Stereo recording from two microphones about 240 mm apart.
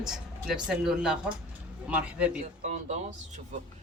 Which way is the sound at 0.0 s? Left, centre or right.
Centre.